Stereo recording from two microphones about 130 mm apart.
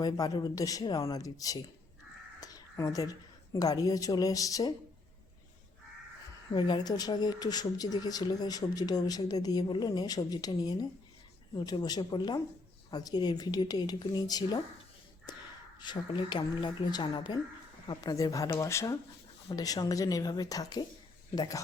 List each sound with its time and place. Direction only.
0.0 s a woman's voice: 30° left (ahead or behind)
6.5 s speech: 35° left (ahead or behind)
15.8 s speech: 35° left (ahead or behind)